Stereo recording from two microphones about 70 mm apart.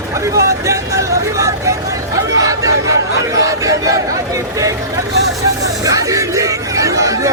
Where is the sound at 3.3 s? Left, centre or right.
Right.